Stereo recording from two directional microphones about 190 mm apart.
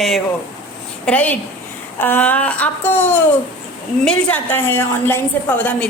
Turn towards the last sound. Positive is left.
turn(degrees=10)  # may be behind; listen again after turning